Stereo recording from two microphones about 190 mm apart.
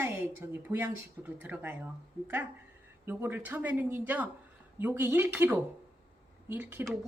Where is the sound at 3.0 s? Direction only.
10° right (ahead or behind).